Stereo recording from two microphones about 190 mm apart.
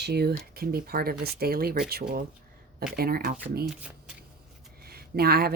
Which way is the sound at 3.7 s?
5° right (ahead or behind).